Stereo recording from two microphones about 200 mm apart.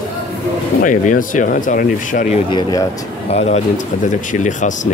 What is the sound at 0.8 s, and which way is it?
Speech, 40° left (ahead or behind).